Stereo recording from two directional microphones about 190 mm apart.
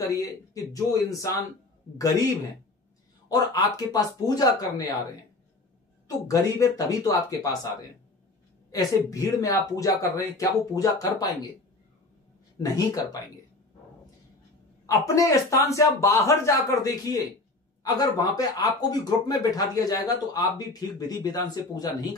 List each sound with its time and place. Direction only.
0.0 s speech: 20° left (ahead or behind)
3.3 s speech: 20° left (ahead or behind)
6.0 s speech: 20° left (ahead or behind)
8.7 s speech: 15° left (ahead or behind)
12.5 s speech: 20° left (ahead or behind)
14.9 s speech: 15° left (ahead or behind)